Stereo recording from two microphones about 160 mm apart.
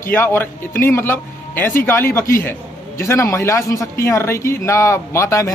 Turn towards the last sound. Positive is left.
turn(degrees=20)  # may be behind; listen again after turning